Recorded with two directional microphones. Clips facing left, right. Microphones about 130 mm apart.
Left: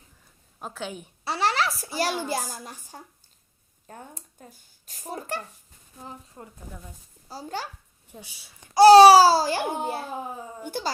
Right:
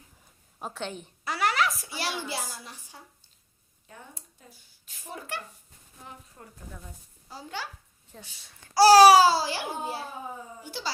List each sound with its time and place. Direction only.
0.6 s a woman's voice: centre (ahead or behind)
1.2 s a woman's voice: 30° left (ahead or behind)
6.4 s speech: 10° left (ahead or behind)
7.3 s a woman's voice: 40° left (ahead or behind)
8.1 s speech: 10° left (ahead or behind)
8.7 s babbling: 20° left (ahead or behind); by 9.6 s 45° left (ahead or behind)
9.7 s a child's voice: 55° left (ahead or behind)